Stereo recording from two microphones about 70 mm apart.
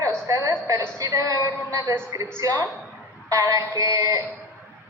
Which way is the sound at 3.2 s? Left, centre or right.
Right.